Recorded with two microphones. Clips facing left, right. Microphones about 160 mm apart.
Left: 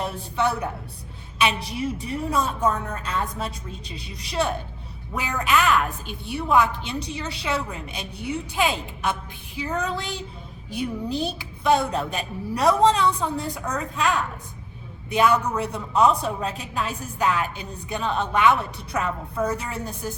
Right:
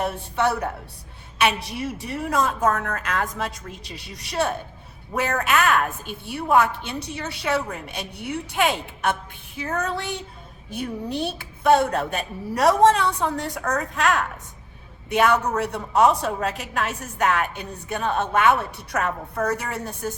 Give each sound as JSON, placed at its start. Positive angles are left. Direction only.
{"t": 0.0, "sound": "a woman's voice", "side_deg": -60}
{"t": 10.7, "sound": "a woman's voice", "side_deg": -60}
{"t": 18.9, "sound": "a woman's voice", "side_deg": -60}